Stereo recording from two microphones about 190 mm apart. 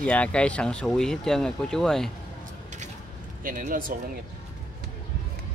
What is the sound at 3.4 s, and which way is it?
Speech, 45° right (ahead or behind).